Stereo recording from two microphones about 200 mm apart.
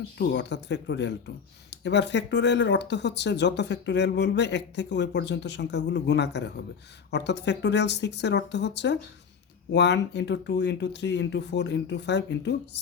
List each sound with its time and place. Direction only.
0.2 s speech: 60° left (ahead or behind)